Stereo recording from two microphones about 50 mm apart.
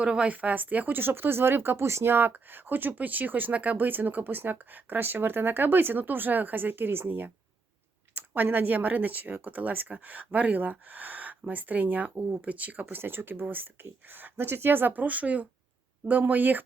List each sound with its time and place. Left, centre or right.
0.0 s speech: right
0.3 s speech: right
2.0 s speech: right
8.4 s speech: right